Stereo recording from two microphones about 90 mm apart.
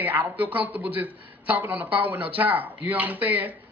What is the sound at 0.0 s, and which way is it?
A man's voice, 20° right (ahead or behind).